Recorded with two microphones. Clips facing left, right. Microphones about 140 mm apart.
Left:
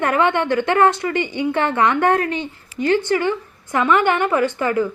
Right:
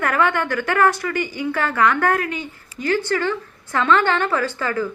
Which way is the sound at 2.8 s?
20° left (ahead or behind).